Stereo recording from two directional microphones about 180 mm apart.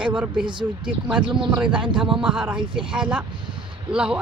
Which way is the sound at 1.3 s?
5° right (ahead or behind).